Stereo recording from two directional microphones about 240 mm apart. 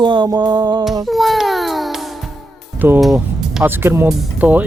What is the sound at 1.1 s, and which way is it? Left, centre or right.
Speech, centre.